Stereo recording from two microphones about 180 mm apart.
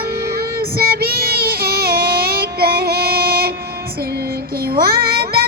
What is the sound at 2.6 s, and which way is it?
Child singing, 60° right (ahead or behind).